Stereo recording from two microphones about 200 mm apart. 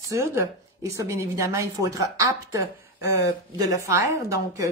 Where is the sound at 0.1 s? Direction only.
15° right (ahead or behind).